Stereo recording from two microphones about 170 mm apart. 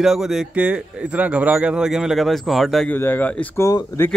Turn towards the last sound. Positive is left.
turn(degrees=15)  # may be behind; listen again after turning